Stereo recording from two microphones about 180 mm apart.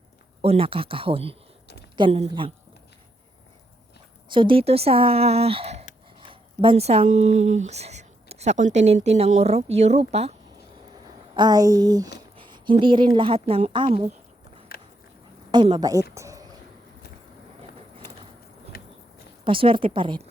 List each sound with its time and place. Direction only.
0.4 s speech: 30° right (ahead or behind)
4.3 s speech: 30° right (ahead or behind)
11.3 s a woman's voice: 20° right (ahead or behind)
15.5 s speech: 25° right (ahead or behind)
16.1 s a sound: 15° right (ahead or behind)
18.7 s a sound: 55° left (ahead or behind)
19.5 s speech: 30° right (ahead or behind)